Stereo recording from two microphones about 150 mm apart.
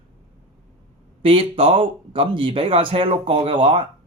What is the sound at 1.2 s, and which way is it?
Speech, 35° right (ahead or behind).